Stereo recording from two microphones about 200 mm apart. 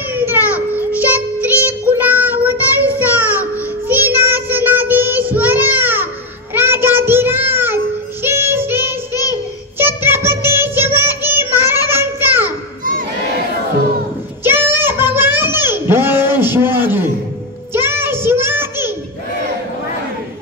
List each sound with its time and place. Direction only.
0.1 s child singing: 10° right (ahead or behind)
9.1 s child singing: 20° left (ahead or behind)
9.8 s child singing: 10° right (ahead or behind)
11.9 s a sound: 10° right (ahead or behind)
14.4 s a sound: 10° right (ahead or behind)
17.7 s child singing: 10° right (ahead or behind)